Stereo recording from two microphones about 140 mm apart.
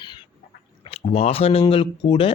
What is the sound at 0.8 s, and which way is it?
Speech, 45° left (ahead or behind).